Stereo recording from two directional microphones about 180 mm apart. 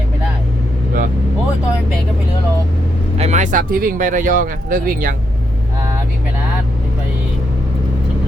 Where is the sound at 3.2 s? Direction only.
40° right (ahead or behind).